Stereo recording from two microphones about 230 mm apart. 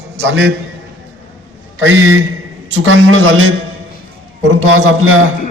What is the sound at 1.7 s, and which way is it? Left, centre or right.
A man's voice, right.